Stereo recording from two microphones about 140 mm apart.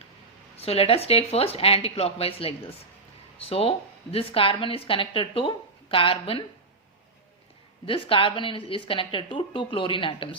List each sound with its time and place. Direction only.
0.6 s a woman's voice: 45° left (ahead or behind)
7.9 s a woman's voice: 40° left (ahead or behind)